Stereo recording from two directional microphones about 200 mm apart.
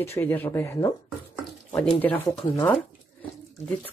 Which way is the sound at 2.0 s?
10° left (ahead or behind).